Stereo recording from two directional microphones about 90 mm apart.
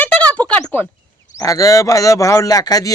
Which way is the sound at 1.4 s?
40° left (ahead or behind).